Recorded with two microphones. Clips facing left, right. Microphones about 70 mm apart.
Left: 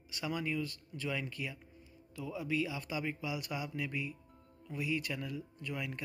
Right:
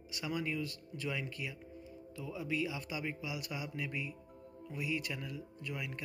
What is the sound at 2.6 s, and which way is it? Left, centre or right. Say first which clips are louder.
A man's voice: left 1 dB; centre.